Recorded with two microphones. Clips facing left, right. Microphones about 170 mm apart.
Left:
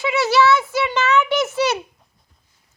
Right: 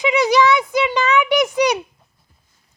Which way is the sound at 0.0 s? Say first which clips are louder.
Right 2 dB; 15° right (ahead or behind).